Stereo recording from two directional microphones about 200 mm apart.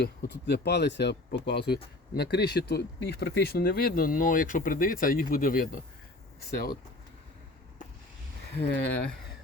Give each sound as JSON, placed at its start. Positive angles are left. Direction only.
{"t": 0.0, "sound": "speech", "side_deg": 55}
{"t": 8.8, "sound": "speech", "side_deg": 55}